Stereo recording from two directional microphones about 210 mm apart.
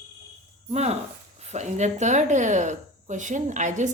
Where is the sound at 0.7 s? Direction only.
30° right (ahead or behind).